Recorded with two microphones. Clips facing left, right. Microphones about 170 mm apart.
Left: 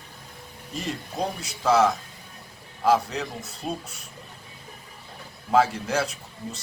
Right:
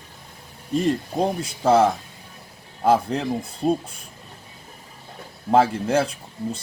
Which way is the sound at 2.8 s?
30° right (ahead or behind).